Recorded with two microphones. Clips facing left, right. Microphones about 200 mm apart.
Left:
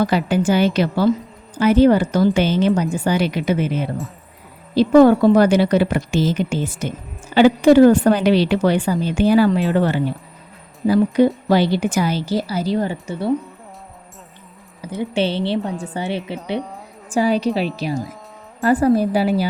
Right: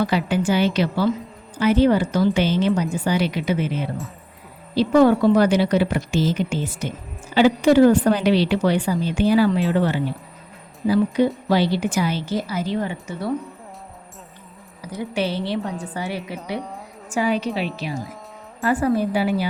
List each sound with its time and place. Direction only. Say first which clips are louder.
0.0 s a woman's voice: left 3 dB; 45° left (ahead or behind); by 13.3 s 30° left (ahead or behind)
14.8 s a woman's voice: left 4 dB; 25° left (ahead or behind)